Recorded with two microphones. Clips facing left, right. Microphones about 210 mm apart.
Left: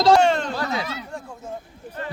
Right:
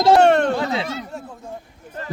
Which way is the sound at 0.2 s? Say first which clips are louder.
Right 5 dB; 65° right (ahead or behind).